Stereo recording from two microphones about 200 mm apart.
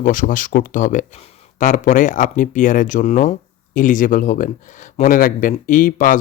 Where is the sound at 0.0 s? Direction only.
40° left (ahead or behind).